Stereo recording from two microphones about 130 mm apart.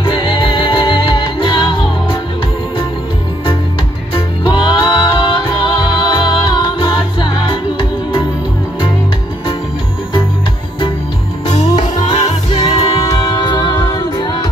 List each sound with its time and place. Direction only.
0.0 s music: 40° left (ahead or behind)
4.1 s music: 35° left (ahead or behind)
11.5 s music: 55° left (ahead or behind)
13.0 s music: 30° left (ahead or behind)